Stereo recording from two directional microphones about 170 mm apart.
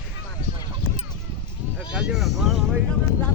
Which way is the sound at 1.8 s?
5° right (ahead or behind).